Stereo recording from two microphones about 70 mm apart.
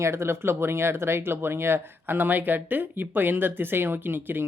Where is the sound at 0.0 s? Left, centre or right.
Right.